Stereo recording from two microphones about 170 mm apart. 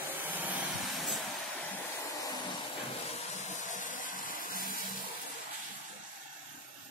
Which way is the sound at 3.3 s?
45° left (ahead or behind).